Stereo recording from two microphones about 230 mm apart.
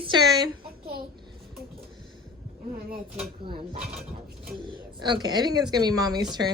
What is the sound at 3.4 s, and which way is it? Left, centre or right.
Speech, right.